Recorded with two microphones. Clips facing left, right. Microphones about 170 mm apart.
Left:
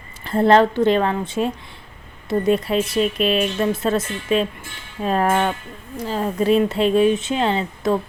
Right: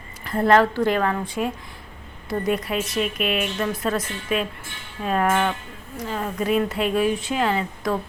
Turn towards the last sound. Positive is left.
turn(degrees=25)  # may be behind; listen again after turning